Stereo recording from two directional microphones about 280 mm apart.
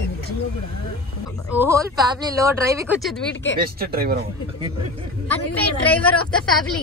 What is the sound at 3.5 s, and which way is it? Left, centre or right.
Speech, right.